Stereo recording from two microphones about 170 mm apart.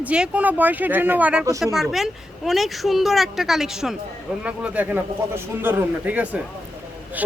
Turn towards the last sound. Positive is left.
turn(degrees=-10)  # may be behind; listen again after turning